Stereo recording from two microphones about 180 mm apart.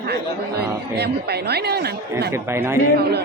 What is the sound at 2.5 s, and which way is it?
Speech, 15° right (ahead or behind).